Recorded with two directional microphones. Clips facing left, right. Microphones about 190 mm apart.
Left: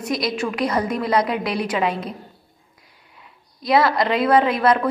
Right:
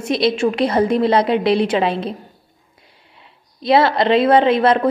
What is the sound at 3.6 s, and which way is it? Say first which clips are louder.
A woman's voice: right 4 dB; 25° right (ahead or behind).